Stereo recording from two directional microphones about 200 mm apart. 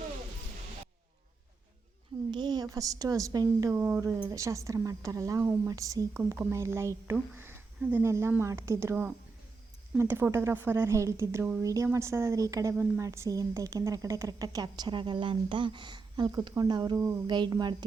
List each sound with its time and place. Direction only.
2.3 s a woman's voice: 20° right (ahead or behind)